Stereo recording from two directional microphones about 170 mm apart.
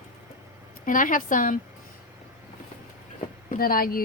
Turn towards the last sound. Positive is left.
turn(degrees=60)  # may be behind; listen again after turning